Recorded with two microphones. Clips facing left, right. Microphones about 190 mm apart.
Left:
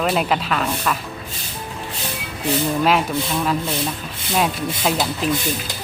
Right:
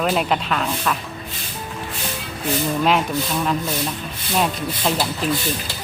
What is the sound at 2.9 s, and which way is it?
Speech, centre (ahead or behind).